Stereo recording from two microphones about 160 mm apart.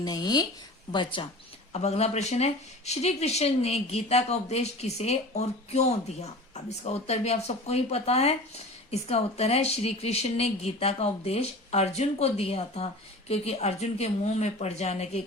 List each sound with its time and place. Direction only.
0.0 s speech: 25° left (ahead or behind); by 15.2 s 40° left (ahead or behind)